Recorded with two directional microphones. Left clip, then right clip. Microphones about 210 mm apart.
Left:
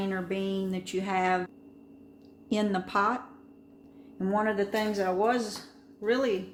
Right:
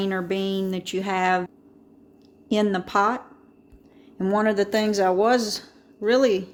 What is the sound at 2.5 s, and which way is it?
Speech, 35° right (ahead or behind).